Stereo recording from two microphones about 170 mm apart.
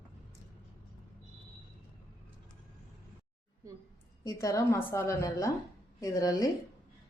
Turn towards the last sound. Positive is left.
turn(degrees=20)  # may be behind; listen again after turning